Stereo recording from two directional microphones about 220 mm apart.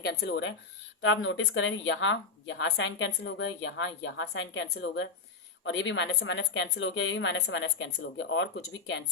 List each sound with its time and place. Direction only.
0.0 s speech: 50° left (ahead or behind)